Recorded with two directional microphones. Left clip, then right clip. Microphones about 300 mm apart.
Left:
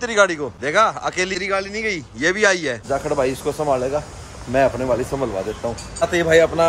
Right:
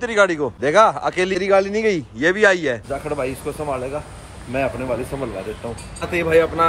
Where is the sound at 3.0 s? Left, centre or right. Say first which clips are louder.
Left 4 dB; centre.